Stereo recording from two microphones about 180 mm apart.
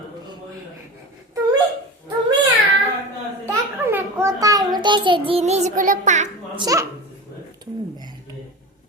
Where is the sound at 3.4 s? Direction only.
15° right (ahead or behind); by 6.2 s 45° right (ahead or behind).